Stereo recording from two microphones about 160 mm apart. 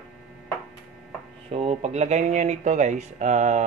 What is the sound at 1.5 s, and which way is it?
Speech, 40° right (ahead or behind).